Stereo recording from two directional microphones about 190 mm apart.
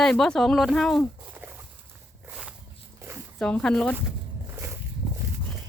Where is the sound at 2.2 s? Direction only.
5° right (ahead or behind).